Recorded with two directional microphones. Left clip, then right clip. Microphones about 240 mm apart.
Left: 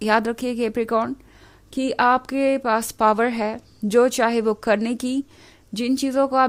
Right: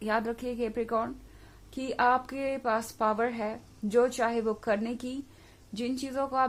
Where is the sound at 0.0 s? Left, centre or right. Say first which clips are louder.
Left 10 dB; left.